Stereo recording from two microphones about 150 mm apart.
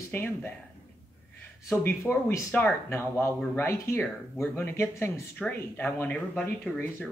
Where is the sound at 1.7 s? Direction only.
15° left (ahead or behind).